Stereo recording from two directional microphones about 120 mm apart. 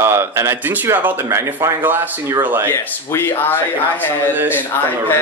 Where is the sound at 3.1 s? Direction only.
15° left (ahead or behind).